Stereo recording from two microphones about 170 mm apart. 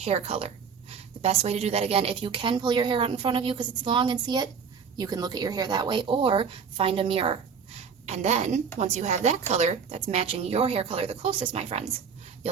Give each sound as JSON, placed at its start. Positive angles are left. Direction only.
{"t": 0.0, "sound": "a woman's voice", "side_deg": -35}